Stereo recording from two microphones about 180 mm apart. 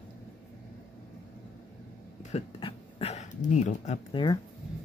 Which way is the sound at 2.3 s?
35° left (ahead or behind).